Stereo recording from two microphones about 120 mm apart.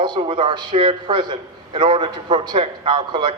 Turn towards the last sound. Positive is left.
turn(degrees=-40)  # may be behind; listen again after turning